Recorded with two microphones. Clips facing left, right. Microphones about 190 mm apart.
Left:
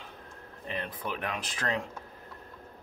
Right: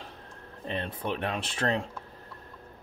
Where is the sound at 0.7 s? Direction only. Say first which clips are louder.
Right 4 dB; 30° right (ahead or behind).